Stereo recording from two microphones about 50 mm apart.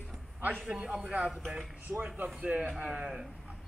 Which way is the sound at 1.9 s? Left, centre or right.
Right.